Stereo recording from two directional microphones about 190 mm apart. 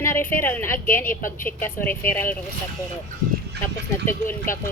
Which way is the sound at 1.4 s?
10° left (ahead or behind).